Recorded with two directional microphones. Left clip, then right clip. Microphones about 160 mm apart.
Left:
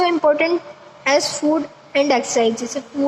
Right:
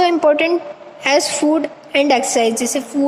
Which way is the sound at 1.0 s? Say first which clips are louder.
Right 2 dB; 45° right (ahead or behind).